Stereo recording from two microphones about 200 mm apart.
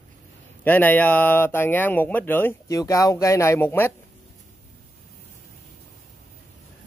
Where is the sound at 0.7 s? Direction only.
10° left (ahead or behind).